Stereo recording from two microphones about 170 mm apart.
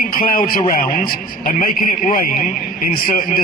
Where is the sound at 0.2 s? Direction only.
60° left (ahead or behind).